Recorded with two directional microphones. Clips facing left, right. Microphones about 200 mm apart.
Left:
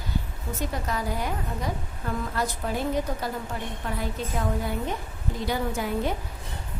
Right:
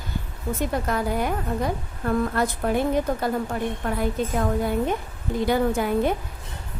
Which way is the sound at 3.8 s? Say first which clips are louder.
Right 4 dB; 55° right (ahead or behind).